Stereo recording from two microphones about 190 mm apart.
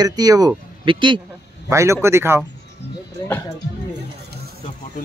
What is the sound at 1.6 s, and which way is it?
Speech, 15° right (ahead or behind).